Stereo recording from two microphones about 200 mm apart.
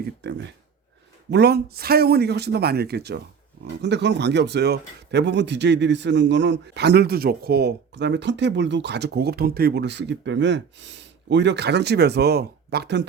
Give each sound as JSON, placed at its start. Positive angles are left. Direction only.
{"t": 0.2, "sound": "speech", "side_deg": -60}